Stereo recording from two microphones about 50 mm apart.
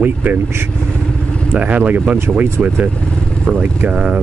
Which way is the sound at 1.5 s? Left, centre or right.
Right.